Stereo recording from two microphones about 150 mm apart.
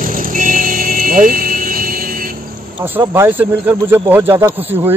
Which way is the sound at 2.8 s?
15° right (ahead or behind).